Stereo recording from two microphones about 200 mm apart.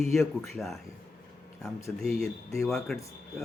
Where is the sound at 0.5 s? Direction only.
Centre (ahead or behind).